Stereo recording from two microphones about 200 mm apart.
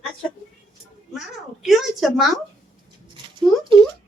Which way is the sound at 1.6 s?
Centre (ahead or behind).